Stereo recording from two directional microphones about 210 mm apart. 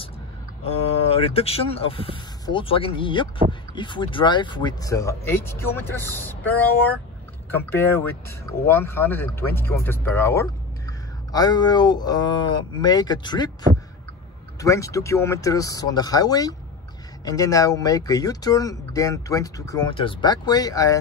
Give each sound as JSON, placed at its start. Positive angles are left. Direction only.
{"t": 0.7, "sound": "speech", "side_deg": 25}
{"t": 7.7, "sound": "speech", "side_deg": 10}
{"t": 14.6, "sound": "speech", "side_deg": 15}